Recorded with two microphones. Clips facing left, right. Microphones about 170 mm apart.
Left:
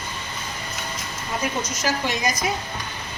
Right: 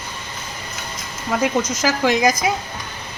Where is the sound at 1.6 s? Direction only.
90° right.